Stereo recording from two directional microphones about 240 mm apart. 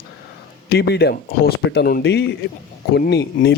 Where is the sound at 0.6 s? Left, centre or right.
Left.